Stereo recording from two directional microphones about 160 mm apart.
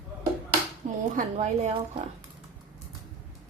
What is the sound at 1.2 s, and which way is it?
Speech, 45° right (ahead or behind).